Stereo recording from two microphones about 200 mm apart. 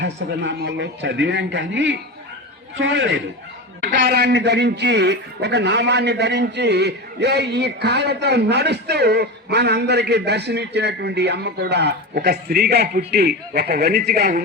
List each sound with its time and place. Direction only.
0.0 s a man's voice: 60° right (ahead or behind)